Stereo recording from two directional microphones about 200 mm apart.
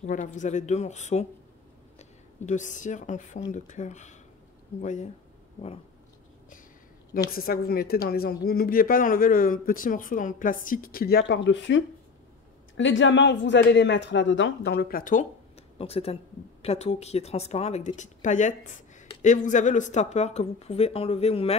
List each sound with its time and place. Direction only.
0.0 s speech: 40° left (ahead or behind)
7.2 s speech: 45° left (ahead or behind)
15.8 s speech: 30° left (ahead or behind)